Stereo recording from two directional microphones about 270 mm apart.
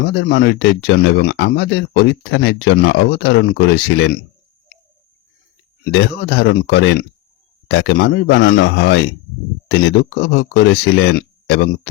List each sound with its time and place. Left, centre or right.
0.1 s speech: left
5.8 s speech: left
10.2 s speech: left